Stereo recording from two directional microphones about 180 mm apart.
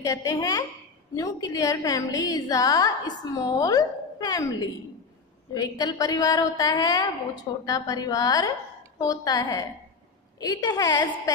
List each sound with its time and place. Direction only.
0.0 s a woman's voice: 15° left (ahead or behind)